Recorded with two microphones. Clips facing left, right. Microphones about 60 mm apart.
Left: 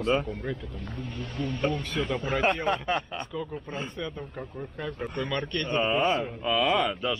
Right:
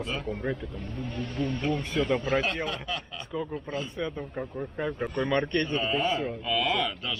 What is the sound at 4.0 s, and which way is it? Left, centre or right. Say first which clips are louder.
Speech: right 3 dB; centre.